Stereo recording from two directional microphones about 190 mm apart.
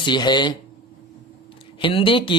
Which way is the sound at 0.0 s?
25° left (ahead or behind).